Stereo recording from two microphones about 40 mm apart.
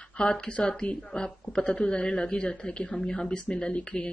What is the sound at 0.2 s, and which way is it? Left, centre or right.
A woman's voice, left.